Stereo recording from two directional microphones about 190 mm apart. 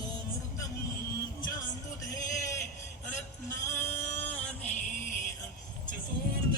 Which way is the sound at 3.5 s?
15° left (ahead or behind).